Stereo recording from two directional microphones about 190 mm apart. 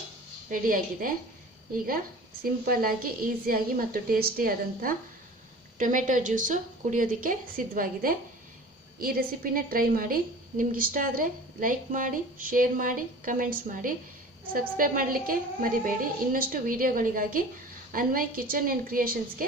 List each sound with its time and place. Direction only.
0.5 s speech: 45° right (ahead or behind)
2.4 s speech: 50° right (ahead or behind)